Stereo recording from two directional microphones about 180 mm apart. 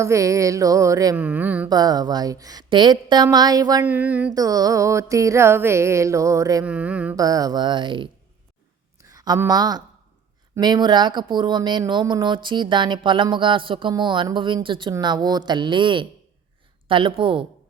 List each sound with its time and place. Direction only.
0.0 s music: 15° right (ahead or behind)
1.7 s speech: 20° right (ahead or behind)
3.8 s music: 10° right (ahead or behind)
4.4 s music: 20° right (ahead or behind)
6.7 s music: 5° right (ahead or behind)
7.2 s a woman's voice: 20° right (ahead or behind)